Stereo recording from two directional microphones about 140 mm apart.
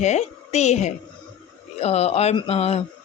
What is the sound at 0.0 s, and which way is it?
Speech, 55° left (ahead or behind).